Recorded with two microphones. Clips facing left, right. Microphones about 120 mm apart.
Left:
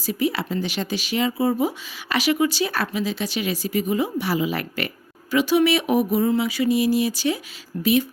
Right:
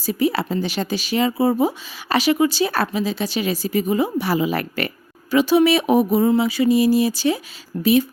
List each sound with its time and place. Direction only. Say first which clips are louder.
0.0 s speech: right 3 dB; 35° right (ahead or behind)
5.3 s speech: right 3 dB; 30° right (ahead or behind)